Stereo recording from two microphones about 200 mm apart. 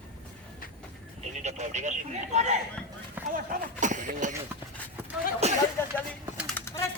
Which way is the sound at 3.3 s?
40° right (ahead or behind).